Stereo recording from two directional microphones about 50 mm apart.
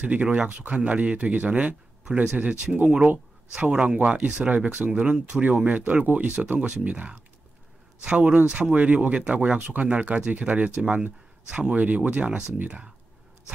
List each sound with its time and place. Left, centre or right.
0.0 s speech: right